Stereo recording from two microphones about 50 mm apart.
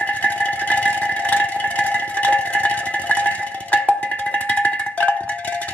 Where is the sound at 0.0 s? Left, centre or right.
Left.